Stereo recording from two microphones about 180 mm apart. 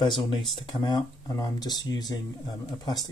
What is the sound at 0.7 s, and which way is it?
Speech, 20° left (ahead or behind).